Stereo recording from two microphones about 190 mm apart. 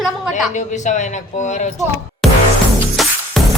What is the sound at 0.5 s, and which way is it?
Speech, 40° left (ahead or behind).